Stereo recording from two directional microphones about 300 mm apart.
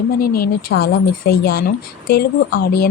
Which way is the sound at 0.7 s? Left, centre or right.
Left.